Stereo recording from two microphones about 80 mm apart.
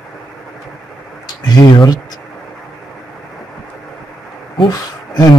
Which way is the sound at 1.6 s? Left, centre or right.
Left.